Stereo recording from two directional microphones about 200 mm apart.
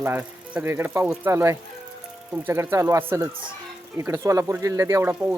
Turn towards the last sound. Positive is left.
turn(degrees=-10)  # may be behind; listen again after turning